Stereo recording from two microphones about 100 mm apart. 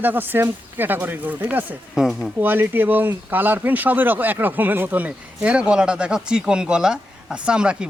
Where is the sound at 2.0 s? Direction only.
5° right (ahead or behind).